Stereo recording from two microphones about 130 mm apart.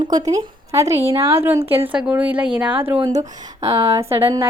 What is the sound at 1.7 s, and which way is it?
Speech, 45° right (ahead or behind).